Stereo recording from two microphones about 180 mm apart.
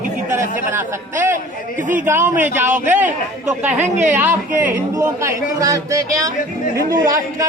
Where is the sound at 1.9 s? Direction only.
10° right (ahead or behind).